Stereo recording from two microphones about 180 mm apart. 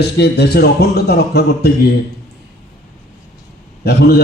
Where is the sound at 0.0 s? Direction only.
65° left (ahead or behind).